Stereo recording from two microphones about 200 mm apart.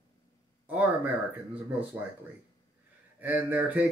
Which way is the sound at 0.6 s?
10° right (ahead or behind).